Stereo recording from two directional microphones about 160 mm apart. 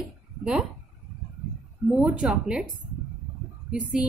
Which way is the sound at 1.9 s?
5° right (ahead or behind).